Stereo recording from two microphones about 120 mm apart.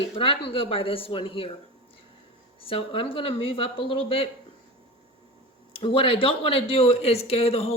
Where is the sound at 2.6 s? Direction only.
50° left (ahead or behind).